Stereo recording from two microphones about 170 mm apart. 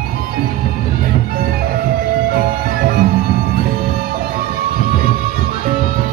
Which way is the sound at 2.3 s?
65° right (ahead or behind).